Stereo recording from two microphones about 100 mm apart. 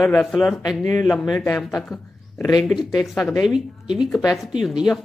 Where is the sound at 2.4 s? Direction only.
45° left (ahead or behind).